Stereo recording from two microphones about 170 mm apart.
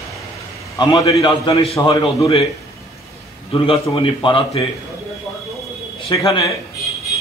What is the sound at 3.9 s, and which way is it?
Speech, 30° left (ahead or behind).